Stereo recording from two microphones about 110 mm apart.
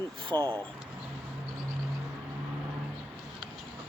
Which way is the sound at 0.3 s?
15° left (ahead or behind).